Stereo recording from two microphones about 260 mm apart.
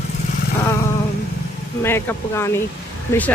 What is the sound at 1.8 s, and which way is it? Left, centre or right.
Speech, centre.